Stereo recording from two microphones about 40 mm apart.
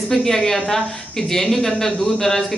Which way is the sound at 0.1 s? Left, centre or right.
Centre.